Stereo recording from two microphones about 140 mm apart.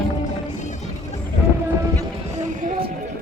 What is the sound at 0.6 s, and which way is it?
Music, 55° left (ahead or behind).